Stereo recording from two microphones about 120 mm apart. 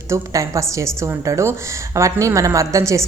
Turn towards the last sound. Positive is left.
turn(degrees=-25)  # may be behind; listen again after turning